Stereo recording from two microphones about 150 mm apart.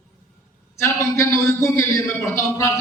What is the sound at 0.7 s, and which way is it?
A man's voice, 20° left (ahead or behind).